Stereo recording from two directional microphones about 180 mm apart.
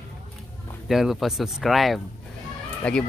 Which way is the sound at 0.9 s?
Centre (ahead or behind).